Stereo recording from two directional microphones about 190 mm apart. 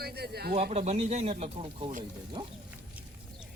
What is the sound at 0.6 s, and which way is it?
Speech, 35° right (ahead or behind).